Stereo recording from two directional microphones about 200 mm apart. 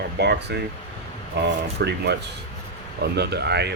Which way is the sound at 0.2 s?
55° right (ahead or behind).